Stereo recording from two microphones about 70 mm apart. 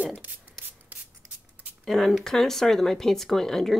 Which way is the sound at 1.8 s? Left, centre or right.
Centre.